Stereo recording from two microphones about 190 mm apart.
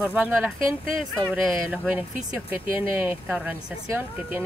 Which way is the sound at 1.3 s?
10° right (ahead or behind).